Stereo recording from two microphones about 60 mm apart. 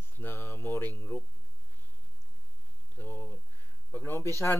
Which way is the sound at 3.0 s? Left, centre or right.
Left.